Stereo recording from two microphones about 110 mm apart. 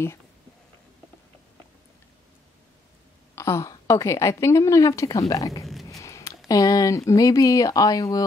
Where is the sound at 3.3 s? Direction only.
25° left (ahead or behind).